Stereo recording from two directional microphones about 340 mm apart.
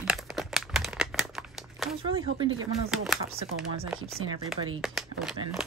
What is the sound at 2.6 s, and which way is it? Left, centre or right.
Speech, centre.